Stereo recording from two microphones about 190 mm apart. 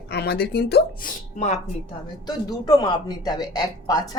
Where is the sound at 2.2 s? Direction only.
20° left (ahead or behind).